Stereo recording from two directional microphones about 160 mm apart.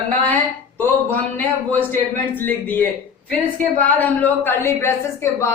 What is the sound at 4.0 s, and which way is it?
A man's voice, 10° left (ahead or behind).